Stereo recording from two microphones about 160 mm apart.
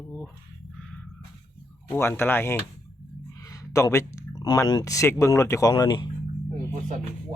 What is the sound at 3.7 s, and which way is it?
Speech, 20° left (ahead or behind).